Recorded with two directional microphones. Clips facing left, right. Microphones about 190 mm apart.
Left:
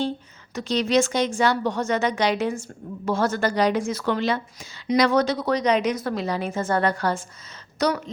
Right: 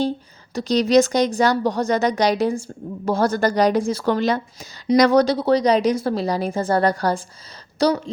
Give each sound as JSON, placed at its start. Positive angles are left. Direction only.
{"t": 0.5, "sound": "a woman's voice", "side_deg": -40}